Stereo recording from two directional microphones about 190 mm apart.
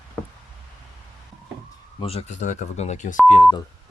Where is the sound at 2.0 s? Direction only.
30° left (ahead or behind).